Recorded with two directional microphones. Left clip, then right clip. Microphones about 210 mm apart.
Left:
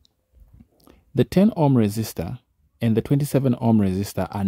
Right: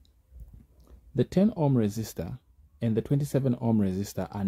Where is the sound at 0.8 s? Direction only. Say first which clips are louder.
Left 6 dB; 35° left (ahead or behind).